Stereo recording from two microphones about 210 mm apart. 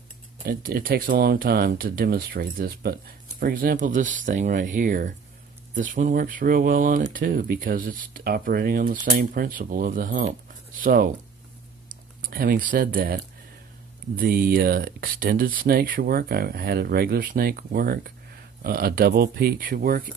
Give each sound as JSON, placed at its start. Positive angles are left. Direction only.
{"t": 0.4, "sound": "speech", "side_deg": -45}
{"t": 12.2, "sound": "speech", "side_deg": -40}